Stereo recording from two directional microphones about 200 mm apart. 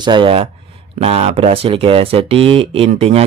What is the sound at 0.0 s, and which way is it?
Speech, 25° right (ahead or behind).